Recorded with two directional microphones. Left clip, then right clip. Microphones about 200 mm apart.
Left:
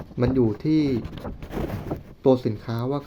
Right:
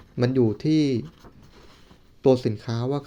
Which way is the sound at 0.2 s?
15° right (ahead or behind).